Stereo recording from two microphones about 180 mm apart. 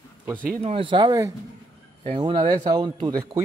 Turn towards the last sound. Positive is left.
turn(degrees=-20)  # may be behind; listen again after turning